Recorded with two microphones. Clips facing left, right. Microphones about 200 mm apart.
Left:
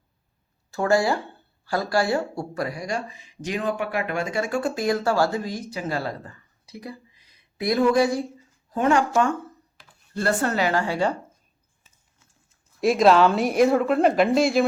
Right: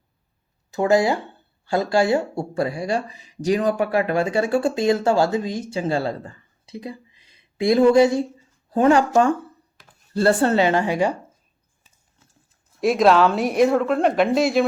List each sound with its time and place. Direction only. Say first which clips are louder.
0.7 s speech: right 3 dB; 20° right (ahead or behind)
12.8 s speech: right 1 dB; centre (ahead or behind)